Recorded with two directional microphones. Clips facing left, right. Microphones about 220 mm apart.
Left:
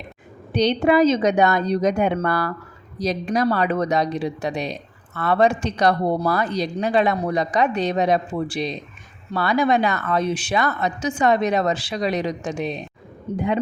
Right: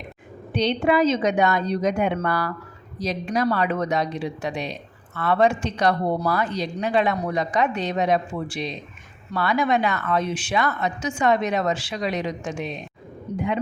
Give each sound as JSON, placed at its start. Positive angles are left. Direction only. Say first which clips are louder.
{"t": 0.5, "sound": "speech", "louder": "left 3 dB", "side_deg": 40}